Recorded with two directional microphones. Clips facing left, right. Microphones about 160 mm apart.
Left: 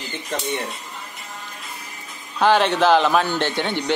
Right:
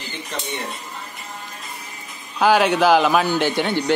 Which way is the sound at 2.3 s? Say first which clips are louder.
Right 1 dB; 5° right (ahead or behind).